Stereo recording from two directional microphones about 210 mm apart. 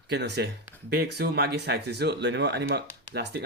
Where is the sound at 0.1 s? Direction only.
55° right (ahead or behind).